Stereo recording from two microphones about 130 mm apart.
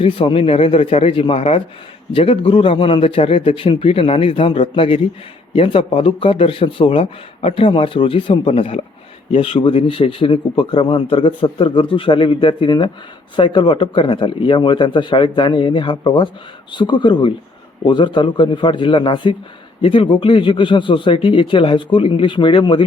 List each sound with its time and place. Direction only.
0.0 s a man's voice: 45° left (ahead or behind)